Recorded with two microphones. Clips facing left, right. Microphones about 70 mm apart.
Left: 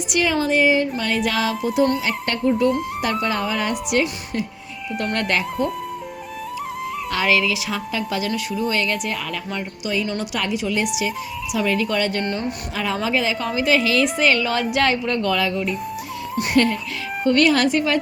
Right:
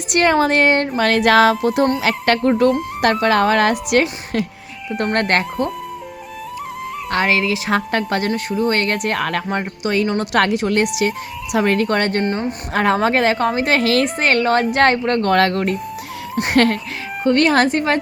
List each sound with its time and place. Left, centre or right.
0.1 s speech: right
2.0 s speech: right
4.9 s a woman's voice: right
7.1 s speech: right
7.7 s a woman's voice: right
16.3 s speech: right
17.2 s speech: right